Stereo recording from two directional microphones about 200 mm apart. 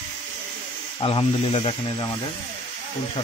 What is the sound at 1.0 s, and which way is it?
Speech, 25° left (ahead or behind).